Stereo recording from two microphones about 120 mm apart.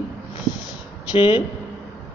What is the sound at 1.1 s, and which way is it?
Speech, 45° left (ahead or behind).